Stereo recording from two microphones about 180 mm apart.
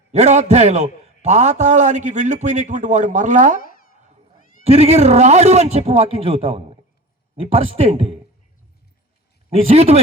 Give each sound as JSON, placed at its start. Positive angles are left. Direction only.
{"t": 0.1, "sound": "a man's voice", "side_deg": -40}
{"t": 4.6, "sound": "a man's voice", "side_deg": -35}
{"t": 9.5, "sound": "a man's voice", "side_deg": -35}